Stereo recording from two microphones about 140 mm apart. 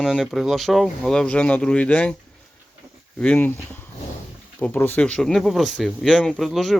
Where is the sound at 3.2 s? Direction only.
5° left (ahead or behind).